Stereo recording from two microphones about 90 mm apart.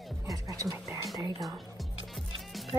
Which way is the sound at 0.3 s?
40° right (ahead or behind).